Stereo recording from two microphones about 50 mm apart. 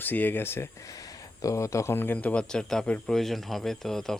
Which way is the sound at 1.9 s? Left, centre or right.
Left.